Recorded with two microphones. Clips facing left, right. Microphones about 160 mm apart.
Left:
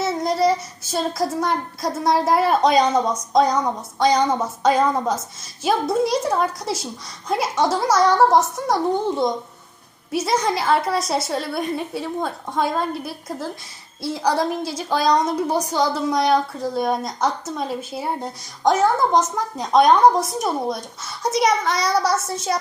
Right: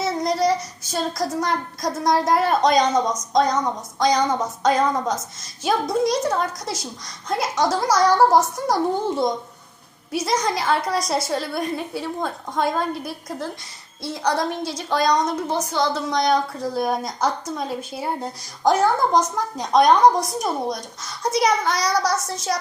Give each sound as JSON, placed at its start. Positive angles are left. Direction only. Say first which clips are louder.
{"t": 0.0, "sound": "a woman's voice", "louder": "left 1 dB", "side_deg": 5}